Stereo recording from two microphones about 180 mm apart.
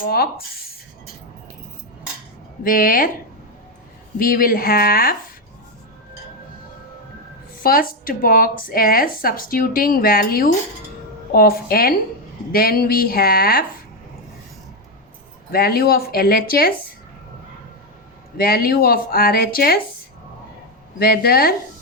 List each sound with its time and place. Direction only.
0.0 s speech: 55° left (ahead or behind)
2.6 s a woman's voice: 50° left (ahead or behind)
4.2 s a woman's voice: 50° left (ahead or behind)
7.6 s a woman's voice: 55° left (ahead or behind)
15.5 s speech: 60° left (ahead or behind)
18.3 s speech: 55° left (ahead or behind)
21.0 s speech: 55° left (ahead or behind)